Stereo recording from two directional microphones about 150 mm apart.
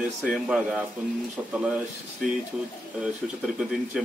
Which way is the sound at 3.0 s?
5° right (ahead or behind).